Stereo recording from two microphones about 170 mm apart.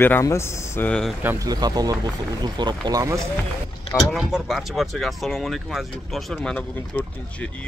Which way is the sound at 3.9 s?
Centre (ahead or behind).